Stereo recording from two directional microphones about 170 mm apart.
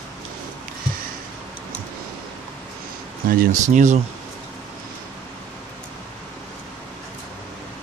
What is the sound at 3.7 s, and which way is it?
Speech, 45° right (ahead or behind).